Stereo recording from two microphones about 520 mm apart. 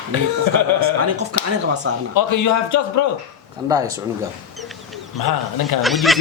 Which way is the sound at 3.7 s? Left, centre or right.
Centre.